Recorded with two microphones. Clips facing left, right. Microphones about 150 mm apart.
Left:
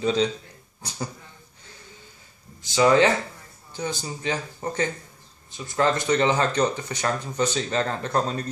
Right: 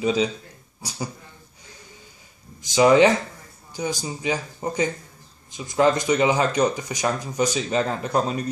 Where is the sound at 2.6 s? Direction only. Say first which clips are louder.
Right 3 dB; 15° right (ahead or behind).